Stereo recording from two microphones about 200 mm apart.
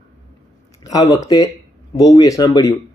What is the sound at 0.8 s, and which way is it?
Speech, 20° left (ahead or behind).